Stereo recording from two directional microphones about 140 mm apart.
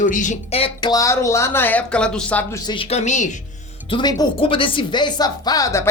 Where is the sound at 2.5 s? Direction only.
25° left (ahead or behind).